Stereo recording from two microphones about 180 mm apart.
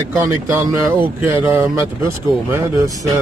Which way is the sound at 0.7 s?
10° right (ahead or behind).